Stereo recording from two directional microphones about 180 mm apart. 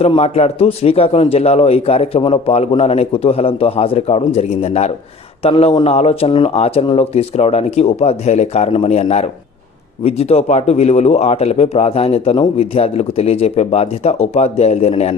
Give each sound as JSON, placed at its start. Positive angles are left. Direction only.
{"t": 0.0, "sound": "a man's voice", "side_deg": 35}